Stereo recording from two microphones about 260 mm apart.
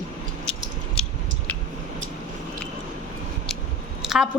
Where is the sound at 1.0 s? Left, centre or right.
Centre.